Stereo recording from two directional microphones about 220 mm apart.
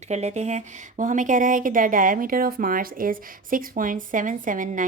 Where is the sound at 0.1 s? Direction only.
30° right (ahead or behind).